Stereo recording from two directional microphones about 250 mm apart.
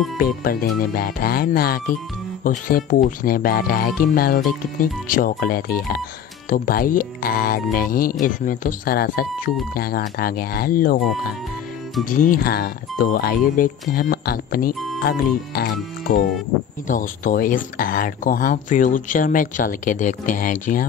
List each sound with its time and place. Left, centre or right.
0.2 s speech: left